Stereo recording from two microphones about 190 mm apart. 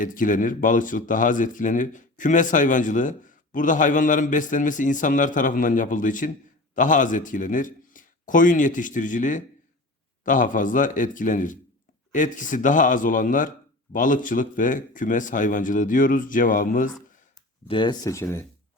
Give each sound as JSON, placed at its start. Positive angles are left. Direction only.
{"t": 0.0, "sound": "speech", "side_deg": 45}
{"t": 17.7, "sound": "speech", "side_deg": 25}